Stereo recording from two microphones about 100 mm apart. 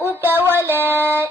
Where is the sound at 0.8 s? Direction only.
20° right (ahead or behind).